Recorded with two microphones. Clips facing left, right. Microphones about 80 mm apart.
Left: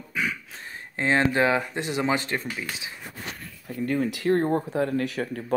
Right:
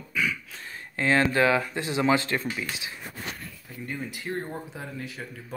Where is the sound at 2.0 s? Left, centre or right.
Left.